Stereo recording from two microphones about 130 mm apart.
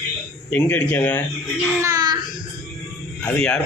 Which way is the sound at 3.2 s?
10° left (ahead or behind).